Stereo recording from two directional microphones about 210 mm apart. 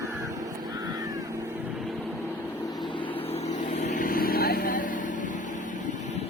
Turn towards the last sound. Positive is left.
turn(degrees=40)  # may be behind; listen again after turning